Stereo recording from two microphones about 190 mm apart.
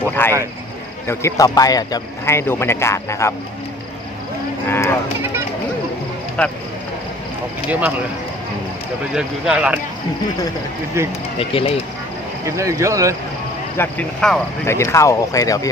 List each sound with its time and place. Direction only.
0.2 s speech: 10° left (ahead or behind)
4.7 s speech: 10° left (ahead or behind)
6.4 s speech: 5° left (ahead or behind)
7.7 s speech: 10° right (ahead or behind)
9.1 s speech: 5° right (ahead or behind)
11.3 s speech: 30° left (ahead or behind)
12.5 s speech: 15° right (ahead or behind)
13.7 s speech: 5° left (ahead or behind)
14.8 s speech: 15° left (ahead or behind)